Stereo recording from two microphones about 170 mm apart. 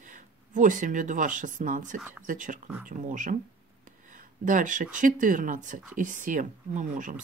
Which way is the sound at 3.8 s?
50° right (ahead or behind).